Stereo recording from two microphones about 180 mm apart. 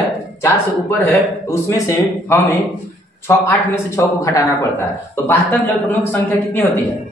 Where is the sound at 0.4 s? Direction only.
15° left (ahead or behind).